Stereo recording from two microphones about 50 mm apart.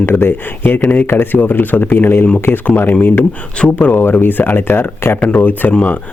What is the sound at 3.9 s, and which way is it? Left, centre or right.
A man's voice, left.